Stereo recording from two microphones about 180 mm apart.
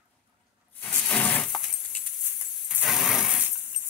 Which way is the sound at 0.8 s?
10° left (ahead or behind).